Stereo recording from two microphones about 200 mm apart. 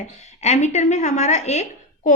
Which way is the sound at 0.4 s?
35° left (ahead or behind).